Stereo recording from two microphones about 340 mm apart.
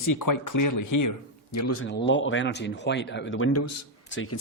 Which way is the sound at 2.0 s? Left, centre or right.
Left.